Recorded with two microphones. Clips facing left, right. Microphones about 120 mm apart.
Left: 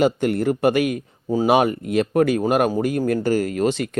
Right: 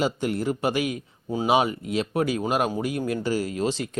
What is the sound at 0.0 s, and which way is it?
Speech, 55° left (ahead or behind).